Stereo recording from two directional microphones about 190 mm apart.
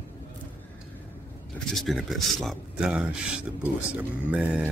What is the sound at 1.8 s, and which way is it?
Speech, centre (ahead or behind).